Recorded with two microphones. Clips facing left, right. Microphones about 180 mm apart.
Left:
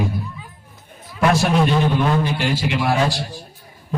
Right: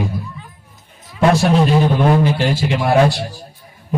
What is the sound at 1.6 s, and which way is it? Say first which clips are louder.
Speech: right 3 dB; 15° right (ahead or behind).